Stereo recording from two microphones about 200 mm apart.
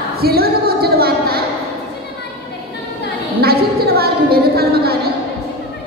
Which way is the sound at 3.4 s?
50° right (ahead or behind).